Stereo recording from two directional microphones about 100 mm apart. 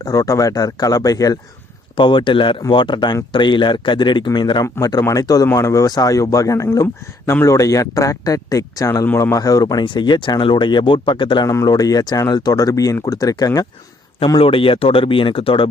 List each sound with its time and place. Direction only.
0.0 s speech: 35° left (ahead or behind)
2.0 s speech: 55° left (ahead or behind)
4.6 s speech: 30° left (ahead or behind)
9.8 s speech: 50° left (ahead or behind)
11.4 s speech: 35° left (ahead or behind)
14.3 s speech: 65° left (ahead or behind)